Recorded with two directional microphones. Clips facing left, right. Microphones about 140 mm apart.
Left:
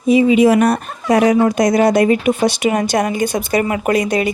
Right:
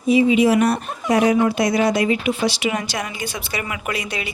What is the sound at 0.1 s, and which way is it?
Speech, 50° left (ahead or behind).